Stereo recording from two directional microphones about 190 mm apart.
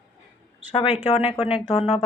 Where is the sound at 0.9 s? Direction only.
35° left (ahead or behind).